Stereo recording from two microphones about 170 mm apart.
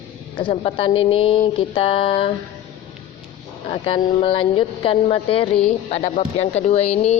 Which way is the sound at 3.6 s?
30° left (ahead or behind).